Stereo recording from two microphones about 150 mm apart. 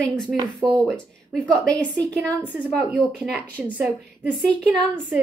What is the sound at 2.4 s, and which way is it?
A woman's voice, 10° right (ahead or behind).